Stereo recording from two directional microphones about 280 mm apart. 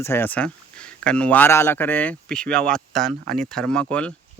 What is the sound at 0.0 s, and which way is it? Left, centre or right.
Speech, centre.